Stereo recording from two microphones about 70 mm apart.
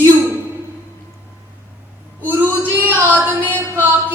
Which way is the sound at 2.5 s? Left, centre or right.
Right.